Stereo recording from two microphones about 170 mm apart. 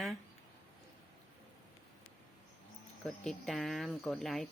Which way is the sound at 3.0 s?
Centre (ahead or behind).